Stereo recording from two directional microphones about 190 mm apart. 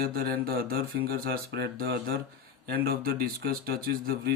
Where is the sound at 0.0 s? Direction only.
55° right (ahead or behind).